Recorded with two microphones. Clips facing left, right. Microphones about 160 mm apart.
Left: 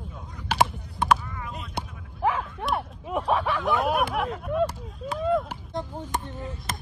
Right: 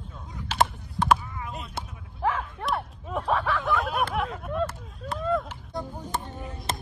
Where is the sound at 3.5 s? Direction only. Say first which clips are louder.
Left 3 dB; centre (ahead or behind).